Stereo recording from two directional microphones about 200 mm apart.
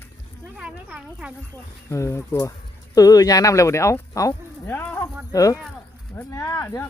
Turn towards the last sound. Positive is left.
turn(degrees=15)  # may be behind; listen again after turning